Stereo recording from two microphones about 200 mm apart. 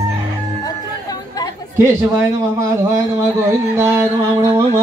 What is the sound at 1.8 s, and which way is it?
A man's voice, 15° right (ahead or behind).